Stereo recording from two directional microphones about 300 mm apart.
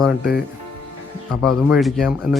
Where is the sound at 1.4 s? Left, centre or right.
Centre.